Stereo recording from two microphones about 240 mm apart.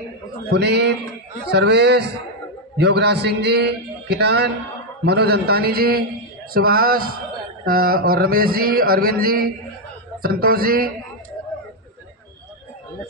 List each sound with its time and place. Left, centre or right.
0.5 s a man's voice: right